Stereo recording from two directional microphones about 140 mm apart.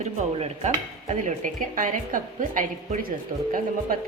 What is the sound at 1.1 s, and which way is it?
A woman's voice, 65° right (ahead or behind).